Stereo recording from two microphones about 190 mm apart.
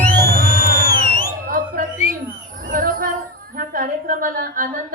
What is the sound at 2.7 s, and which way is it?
Jingle bell, 50° right (ahead or behind).